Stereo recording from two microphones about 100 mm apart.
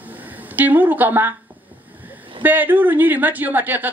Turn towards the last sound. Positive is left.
turn(degrees=-20)  # may be behind; listen again after turning